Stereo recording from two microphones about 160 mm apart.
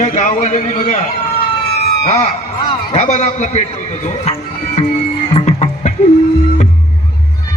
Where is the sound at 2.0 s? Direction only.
45° left (ahead or behind).